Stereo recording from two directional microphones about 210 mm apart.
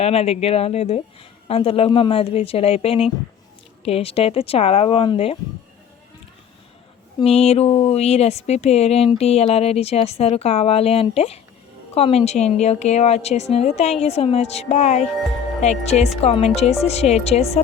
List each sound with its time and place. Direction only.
0.0 s speech: 30° left (ahead or behind)
7.2 s a woman's voice: 30° left (ahead or behind)